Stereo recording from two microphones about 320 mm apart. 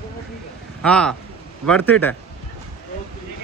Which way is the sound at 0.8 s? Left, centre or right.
Centre.